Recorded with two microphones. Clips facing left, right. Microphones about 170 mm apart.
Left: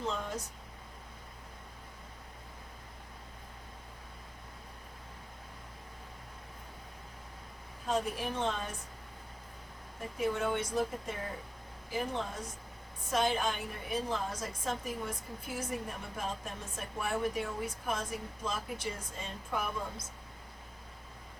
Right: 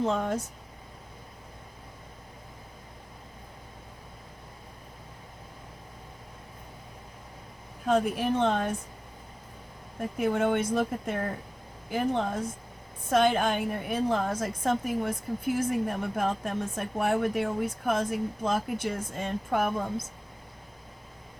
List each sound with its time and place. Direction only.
0.0 s speech: 55° right (ahead or behind)
7.9 s speech: 60° right (ahead or behind)
10.2 s speech: 55° right (ahead or behind)